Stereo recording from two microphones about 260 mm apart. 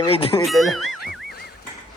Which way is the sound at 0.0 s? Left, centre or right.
Left.